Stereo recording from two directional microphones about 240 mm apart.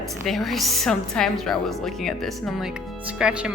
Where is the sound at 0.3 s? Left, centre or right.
Centre.